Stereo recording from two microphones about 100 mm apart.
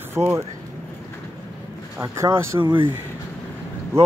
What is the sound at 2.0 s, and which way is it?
Speech, 30° right (ahead or behind).